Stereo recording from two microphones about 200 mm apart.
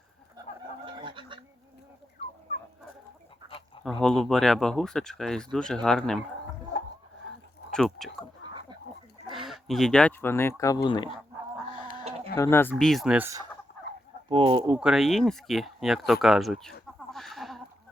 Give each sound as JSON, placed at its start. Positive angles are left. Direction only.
{"t": 0.4, "sound": "chicken", "side_deg": -20}
{"t": 0.9, "sound": "fowl", "side_deg": -25}
{"t": 3.8, "sound": "speech", "side_deg": 0}
{"t": 7.7, "sound": "speech", "side_deg": 5}
{"t": 9.3, "sound": "speech", "side_deg": 0}
{"t": 12.4, "sound": "speech", "side_deg": 10}
{"t": 12.7, "sound": "speech", "side_deg": 0}
{"t": 14.3, "sound": "speech", "side_deg": -25}
{"t": 14.7, "sound": "speech", "side_deg": -5}
{"t": 17.1, "sound": "a sound", "side_deg": 0}